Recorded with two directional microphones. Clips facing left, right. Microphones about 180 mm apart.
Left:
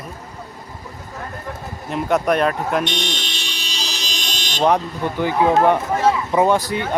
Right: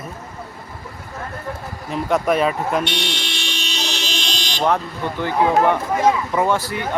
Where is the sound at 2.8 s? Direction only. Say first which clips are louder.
Even; 20° left (ahead or behind).